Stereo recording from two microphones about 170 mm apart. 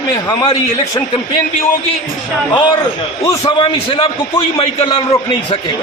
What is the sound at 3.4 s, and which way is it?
A man's voice, 30° left (ahead or behind).